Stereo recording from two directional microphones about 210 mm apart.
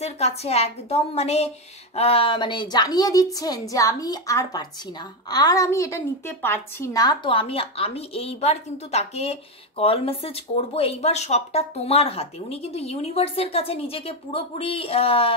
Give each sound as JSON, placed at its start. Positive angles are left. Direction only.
{"t": 0.0, "sound": "a woman's voice", "side_deg": 30}